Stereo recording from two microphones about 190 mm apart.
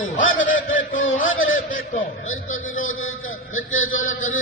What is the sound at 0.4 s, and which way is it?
Honk, 45° left (ahead or behind).